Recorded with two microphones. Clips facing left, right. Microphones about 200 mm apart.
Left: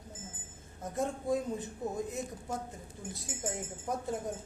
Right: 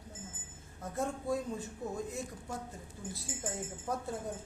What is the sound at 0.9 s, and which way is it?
Speech, 20° left (ahead or behind).